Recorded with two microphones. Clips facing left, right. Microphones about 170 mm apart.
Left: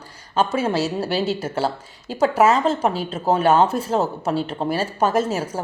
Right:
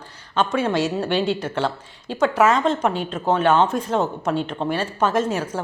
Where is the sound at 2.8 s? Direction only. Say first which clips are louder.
Even; 35° left (ahead or behind).